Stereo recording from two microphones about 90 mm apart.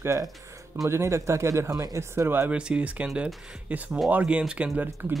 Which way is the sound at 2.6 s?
10° right (ahead or behind).